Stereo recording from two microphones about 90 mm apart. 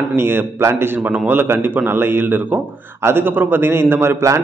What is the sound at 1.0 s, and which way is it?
A man's voice, 15° right (ahead or behind).